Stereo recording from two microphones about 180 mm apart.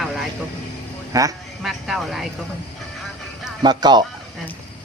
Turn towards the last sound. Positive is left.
turn(degrees=-25)  # may be behind; listen again after turning